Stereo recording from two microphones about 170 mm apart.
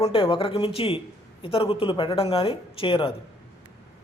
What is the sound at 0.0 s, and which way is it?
Speech, 30° left (ahead or behind).